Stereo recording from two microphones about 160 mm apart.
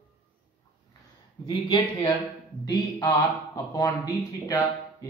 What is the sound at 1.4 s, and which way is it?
Speech, 25° left (ahead or behind).